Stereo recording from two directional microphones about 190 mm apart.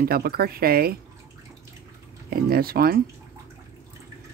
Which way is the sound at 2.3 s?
50° right (ahead or behind).